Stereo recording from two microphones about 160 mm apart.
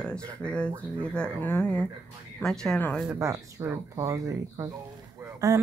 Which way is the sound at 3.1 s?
15° right (ahead or behind).